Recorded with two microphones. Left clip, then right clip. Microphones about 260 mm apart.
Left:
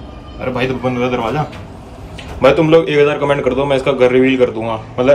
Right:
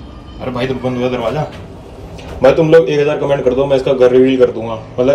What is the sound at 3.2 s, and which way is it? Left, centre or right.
A man's voice, left.